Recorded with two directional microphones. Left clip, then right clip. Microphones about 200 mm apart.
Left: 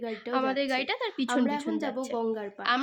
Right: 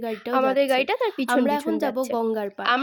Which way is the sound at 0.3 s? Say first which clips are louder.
Right 8 dB; 30° right (ahead or behind).